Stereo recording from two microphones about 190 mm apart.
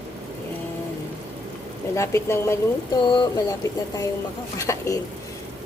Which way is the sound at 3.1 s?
25° left (ahead or behind).